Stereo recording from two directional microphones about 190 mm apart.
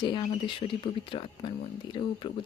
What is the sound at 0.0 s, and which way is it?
Speech, 25° left (ahead or behind).